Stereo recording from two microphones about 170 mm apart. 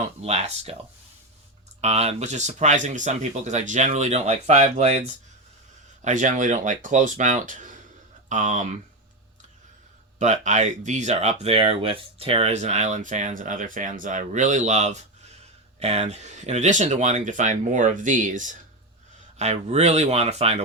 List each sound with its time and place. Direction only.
0.2 s speech: 40° right (ahead or behind)
1.8 s speech: 40° right (ahead or behind)
6.0 s speech: 45° right (ahead or behind)
10.2 s speech: 45° right (ahead or behind)